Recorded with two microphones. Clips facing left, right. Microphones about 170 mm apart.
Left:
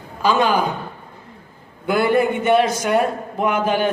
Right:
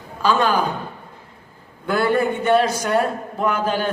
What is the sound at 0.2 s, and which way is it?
Speech, 10° left (ahead or behind).